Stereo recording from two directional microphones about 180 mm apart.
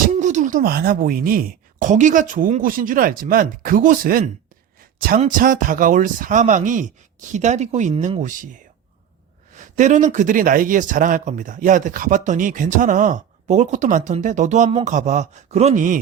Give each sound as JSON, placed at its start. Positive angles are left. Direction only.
{"t": 0.1, "sound": "speech", "side_deg": -40}
{"t": 4.8, "sound": "a sound", "side_deg": -55}
{"t": 5.3, "sound": "speech", "side_deg": -50}
{"t": 9.6, "sound": "speech", "side_deg": -45}